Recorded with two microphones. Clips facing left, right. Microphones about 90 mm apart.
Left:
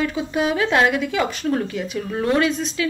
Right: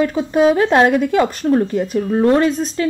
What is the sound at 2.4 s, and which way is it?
Speech, 45° right (ahead or behind).